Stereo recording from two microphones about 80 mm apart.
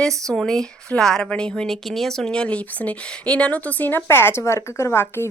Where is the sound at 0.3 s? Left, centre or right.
Centre.